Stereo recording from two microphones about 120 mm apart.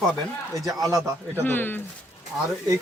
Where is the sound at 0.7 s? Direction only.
25° right (ahead or behind).